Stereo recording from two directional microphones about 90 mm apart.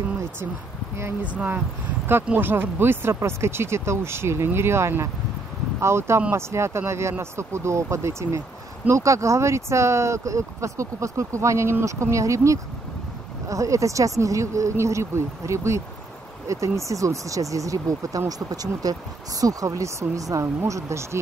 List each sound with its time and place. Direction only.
1.2 s speech: 15° right (ahead or behind); by 21.2 s 35° right (ahead or behind)